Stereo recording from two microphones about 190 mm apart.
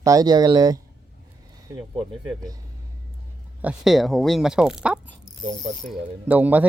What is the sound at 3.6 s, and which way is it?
Speech, centre (ahead or behind).